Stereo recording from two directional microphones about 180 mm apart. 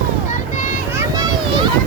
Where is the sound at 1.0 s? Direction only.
25° right (ahead or behind).